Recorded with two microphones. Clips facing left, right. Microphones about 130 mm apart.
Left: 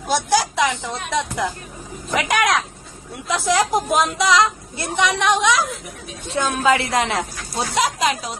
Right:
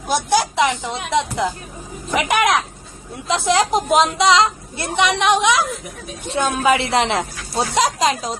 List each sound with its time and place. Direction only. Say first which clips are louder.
0.1 s a woman's voice: right 1 dB; 20° right (ahead or behind)
2.1 s a woman's voice: right 2 dB; 20° right (ahead or behind); by 8.4 s 35° right (ahead or behind)